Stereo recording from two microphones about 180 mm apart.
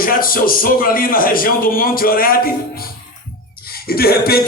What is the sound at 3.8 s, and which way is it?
Music, 55° left (ahead or behind).